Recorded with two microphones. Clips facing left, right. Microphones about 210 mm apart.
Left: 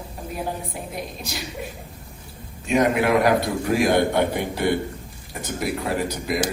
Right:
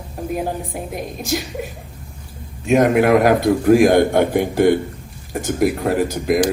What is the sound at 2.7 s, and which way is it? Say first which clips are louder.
A man's voice: right 6 dB; 50° right (ahead or behind).